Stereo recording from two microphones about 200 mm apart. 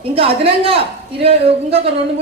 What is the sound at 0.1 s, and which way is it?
A man's voice, 30° right (ahead or behind).